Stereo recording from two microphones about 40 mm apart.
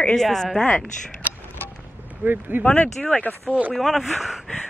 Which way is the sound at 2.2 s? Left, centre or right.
Right.